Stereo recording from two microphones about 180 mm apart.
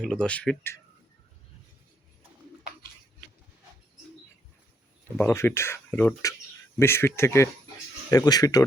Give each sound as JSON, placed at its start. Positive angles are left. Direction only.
{"t": 0.0, "sound": "speech", "side_deg": 5}
{"t": 5.1, "sound": "speech", "side_deg": 10}